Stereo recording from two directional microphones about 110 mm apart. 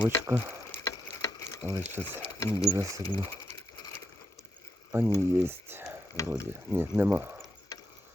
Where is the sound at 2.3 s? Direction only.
30° left (ahead or behind).